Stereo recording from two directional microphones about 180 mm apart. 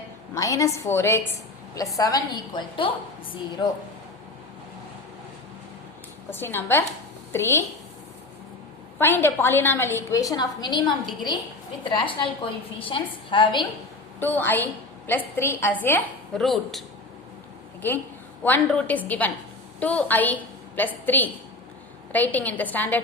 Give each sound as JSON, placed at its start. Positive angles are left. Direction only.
{"t": 0.3, "sound": "a woman's voice", "side_deg": 20}
{"t": 6.3, "sound": "a woman's voice", "side_deg": 10}
{"t": 9.0, "sound": "a woman's voice", "side_deg": 10}
{"t": 14.2, "sound": "a woman's voice", "side_deg": 10}
{"t": 16.4, "sound": "speech", "side_deg": 0}
{"t": 18.4, "sound": "a woman's voice", "side_deg": 10}